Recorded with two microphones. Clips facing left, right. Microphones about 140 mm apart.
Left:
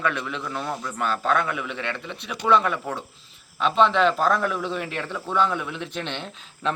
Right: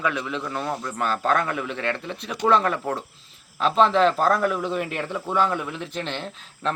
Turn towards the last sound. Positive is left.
turn(degrees=0)  # may be behind; listen again after turning